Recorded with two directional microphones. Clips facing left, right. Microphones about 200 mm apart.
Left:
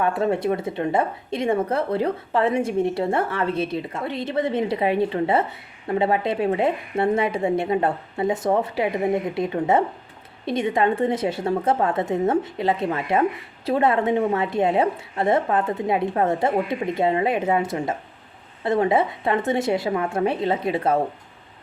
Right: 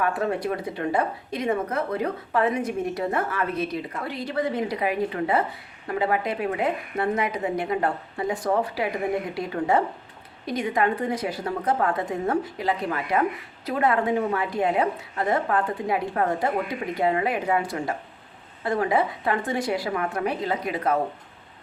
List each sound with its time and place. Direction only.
0.0 s speech: 25° left (ahead or behind)